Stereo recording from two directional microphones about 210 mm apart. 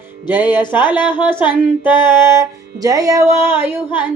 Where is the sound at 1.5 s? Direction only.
10° right (ahead or behind).